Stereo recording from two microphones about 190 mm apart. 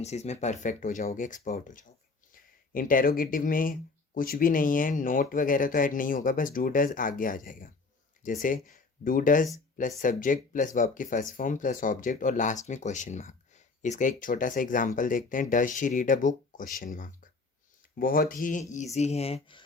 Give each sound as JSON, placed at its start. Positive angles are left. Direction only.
{"t": 0.0, "sound": "speech", "side_deg": 35}